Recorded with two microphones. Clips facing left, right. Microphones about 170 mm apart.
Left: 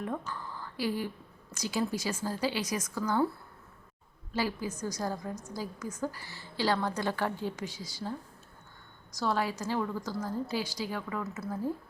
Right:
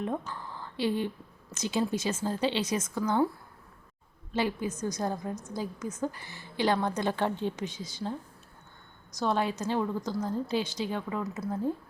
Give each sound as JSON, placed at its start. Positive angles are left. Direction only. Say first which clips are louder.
{"t": 0.0, "sound": "a woman's voice", "louder": "right 3 dB", "side_deg": -20}
{"t": 4.4, "sound": "a woman's voice", "louder": "right 3 dB", "side_deg": -20}
{"t": 9.1, "sound": "a woman's voice", "louder": "right 2 dB", "side_deg": -20}